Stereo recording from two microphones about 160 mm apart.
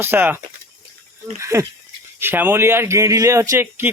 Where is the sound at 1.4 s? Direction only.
20° right (ahead or behind).